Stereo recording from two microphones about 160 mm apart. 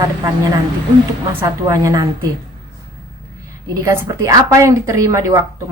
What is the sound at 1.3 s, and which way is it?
Speech, 15° right (ahead or behind).